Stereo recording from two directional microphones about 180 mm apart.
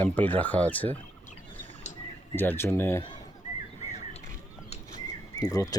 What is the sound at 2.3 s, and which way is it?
Speech, 10° left (ahead or behind).